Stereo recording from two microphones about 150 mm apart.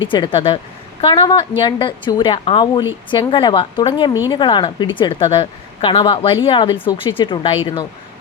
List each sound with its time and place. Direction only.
0.1 s a woman's voice: 35° left (ahead or behind)